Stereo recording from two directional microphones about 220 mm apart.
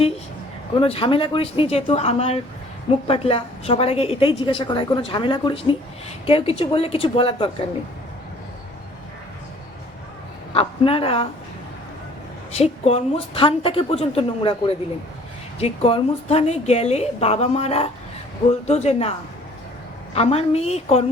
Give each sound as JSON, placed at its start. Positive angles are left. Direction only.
{"t": 0.8, "sound": "a woman's voice", "side_deg": 25}
{"t": 10.5, "sound": "a woman's voice", "side_deg": 25}
{"t": 12.5, "sound": "a woman's voice", "side_deg": 30}
{"t": 20.1, "sound": "a woman's voice", "side_deg": 25}